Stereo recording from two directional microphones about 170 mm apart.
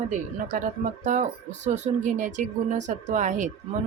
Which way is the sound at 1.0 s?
45° right (ahead or behind).